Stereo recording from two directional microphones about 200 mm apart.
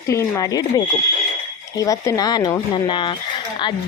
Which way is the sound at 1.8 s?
15° left (ahead or behind).